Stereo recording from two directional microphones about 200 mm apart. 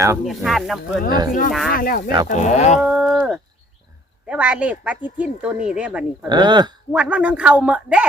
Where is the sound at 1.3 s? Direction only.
45° left (ahead or behind).